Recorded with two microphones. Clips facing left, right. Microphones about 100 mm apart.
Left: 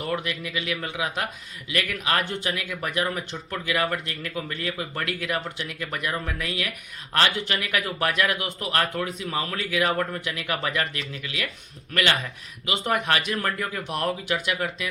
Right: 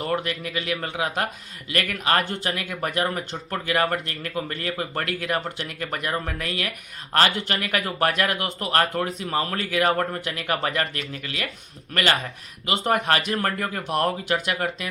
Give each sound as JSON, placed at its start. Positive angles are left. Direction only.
{"t": 0.0, "sound": "speech", "side_deg": -40}
{"t": 12.6, "sound": "speech", "side_deg": -45}